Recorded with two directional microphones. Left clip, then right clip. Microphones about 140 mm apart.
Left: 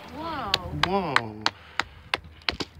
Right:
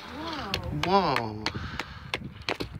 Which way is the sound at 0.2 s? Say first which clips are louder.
Left 4 dB; centre (ahead or behind).